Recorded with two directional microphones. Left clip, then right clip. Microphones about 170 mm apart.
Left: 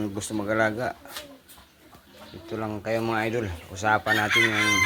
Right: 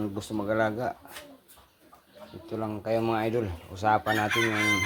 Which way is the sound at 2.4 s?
Centre (ahead or behind).